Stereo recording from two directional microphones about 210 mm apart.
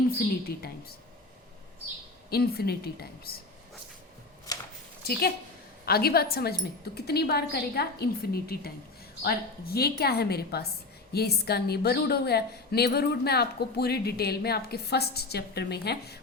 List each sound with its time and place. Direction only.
0.4 s a woman's voice: 45° left (ahead or behind)
2.3 s a woman's voice: 50° left (ahead or behind)
4.5 s shuffling cards: 20° left (ahead or behind)
5.8 s a woman's voice: 45° left (ahead or behind)